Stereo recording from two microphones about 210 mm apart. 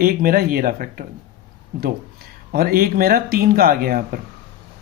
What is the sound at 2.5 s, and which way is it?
Speech, 45° right (ahead or behind).